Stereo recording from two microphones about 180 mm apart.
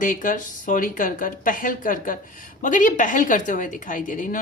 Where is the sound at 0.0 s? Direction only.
45° left (ahead or behind).